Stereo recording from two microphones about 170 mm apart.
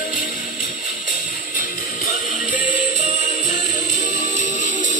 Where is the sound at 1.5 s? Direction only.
50° left (ahead or behind).